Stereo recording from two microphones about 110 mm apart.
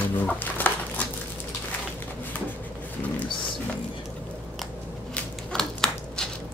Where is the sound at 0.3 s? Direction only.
15° left (ahead or behind).